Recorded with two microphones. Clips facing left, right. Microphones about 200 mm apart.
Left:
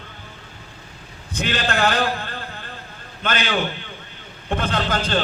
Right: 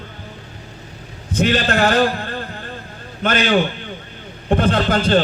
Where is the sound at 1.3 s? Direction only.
40° right (ahead or behind).